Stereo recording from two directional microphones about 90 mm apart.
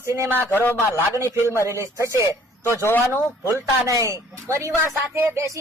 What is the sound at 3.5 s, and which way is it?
Speech, 35° right (ahead or behind).